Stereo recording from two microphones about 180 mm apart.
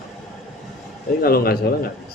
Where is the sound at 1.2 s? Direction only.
55° left (ahead or behind).